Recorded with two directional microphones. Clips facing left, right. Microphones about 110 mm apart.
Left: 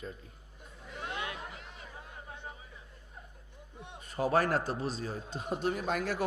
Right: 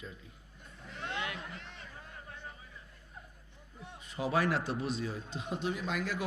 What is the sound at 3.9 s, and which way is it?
A man's voice, 45° left (ahead or behind).